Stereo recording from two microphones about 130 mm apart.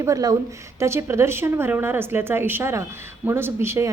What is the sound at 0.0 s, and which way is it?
A woman's voice, 25° right (ahead or behind).